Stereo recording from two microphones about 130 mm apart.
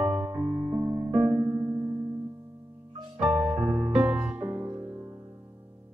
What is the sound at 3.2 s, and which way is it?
Music, 5° right (ahead or behind).